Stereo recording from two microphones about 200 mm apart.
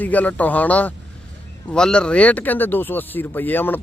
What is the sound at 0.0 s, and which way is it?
Speech, 10° left (ahead or behind).